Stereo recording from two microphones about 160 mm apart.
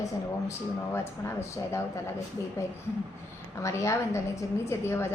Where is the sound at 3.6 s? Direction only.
20° left (ahead or behind).